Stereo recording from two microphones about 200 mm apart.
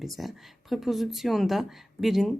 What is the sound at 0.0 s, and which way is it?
Speech, centre (ahead or behind).